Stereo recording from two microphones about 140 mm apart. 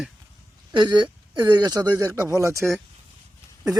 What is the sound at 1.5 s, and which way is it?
Speech, 30° right (ahead or behind).